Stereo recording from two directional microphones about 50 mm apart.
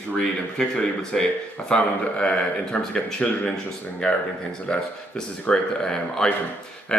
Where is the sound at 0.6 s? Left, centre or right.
Centre.